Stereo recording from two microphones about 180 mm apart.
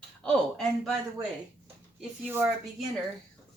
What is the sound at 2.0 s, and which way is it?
Speech, 10° right (ahead or behind).